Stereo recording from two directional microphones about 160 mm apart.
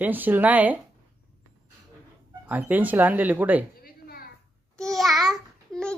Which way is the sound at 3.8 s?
70° left (ahead or behind).